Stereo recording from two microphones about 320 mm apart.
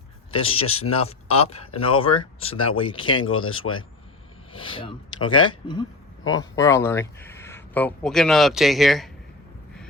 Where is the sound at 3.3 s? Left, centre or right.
Left.